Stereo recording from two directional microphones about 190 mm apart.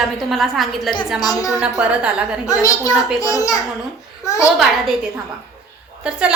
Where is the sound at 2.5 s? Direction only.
20° left (ahead or behind).